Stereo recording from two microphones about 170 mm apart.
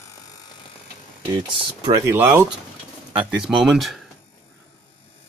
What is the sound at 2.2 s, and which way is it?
Speech, 5° right (ahead or behind).